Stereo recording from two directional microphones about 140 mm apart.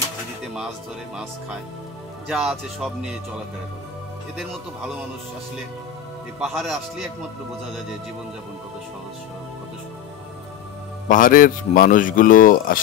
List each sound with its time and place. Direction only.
2.2 s a man's voice: centre (ahead or behind)
6.4 s a man's voice: 5° right (ahead or behind)
11.1 s speech: 75° left (ahead or behind)